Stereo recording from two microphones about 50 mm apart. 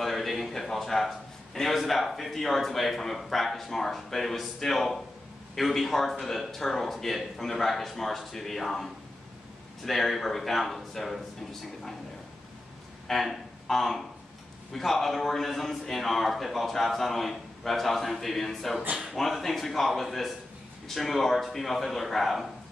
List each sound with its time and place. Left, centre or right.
0.0 s a man's voice: centre
13.1 s a man's voice: centre